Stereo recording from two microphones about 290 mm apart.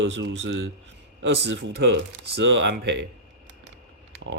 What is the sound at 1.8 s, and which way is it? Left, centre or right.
Speech, right.